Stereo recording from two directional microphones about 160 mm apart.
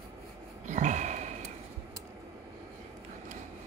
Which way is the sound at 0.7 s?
50° right (ahead or behind).